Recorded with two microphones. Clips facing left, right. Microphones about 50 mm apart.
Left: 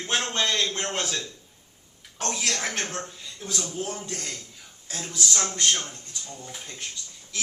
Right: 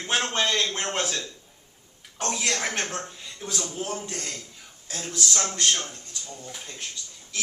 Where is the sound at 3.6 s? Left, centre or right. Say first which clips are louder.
Even; right.